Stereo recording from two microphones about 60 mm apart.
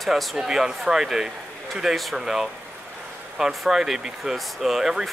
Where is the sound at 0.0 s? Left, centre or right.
Centre.